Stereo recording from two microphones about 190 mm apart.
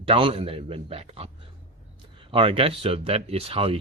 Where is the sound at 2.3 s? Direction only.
30° right (ahead or behind).